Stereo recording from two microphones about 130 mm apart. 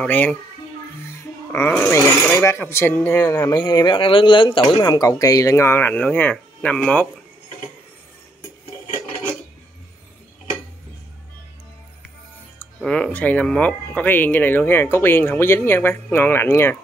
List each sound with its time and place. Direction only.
0.0 s speech: 10° left (ahead or behind)
1.1 s music: 15° left (ahead or behind)
1.7 s speech: 15° left (ahead or behind)
12.5 s speech: 5° left (ahead or behind)